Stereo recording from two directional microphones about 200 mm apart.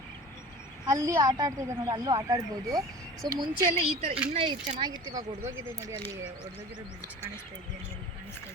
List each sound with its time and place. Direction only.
0.9 s a woman's voice: 15° right (ahead or behind)
4.8 s a woman's voice: 20° right (ahead or behind)